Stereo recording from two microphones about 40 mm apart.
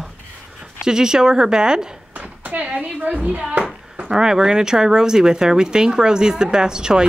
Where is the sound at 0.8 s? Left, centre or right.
Centre.